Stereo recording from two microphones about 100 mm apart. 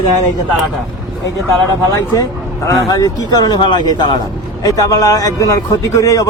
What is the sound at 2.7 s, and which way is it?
A man's voice, 40° left (ahead or behind).